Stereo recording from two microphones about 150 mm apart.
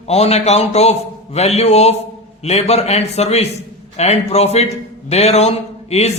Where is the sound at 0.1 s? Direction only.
45° left (ahead or behind).